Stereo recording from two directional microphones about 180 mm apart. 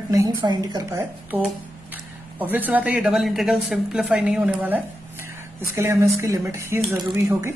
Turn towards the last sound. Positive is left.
turn(degrees=-20)  # may be behind; listen again after turning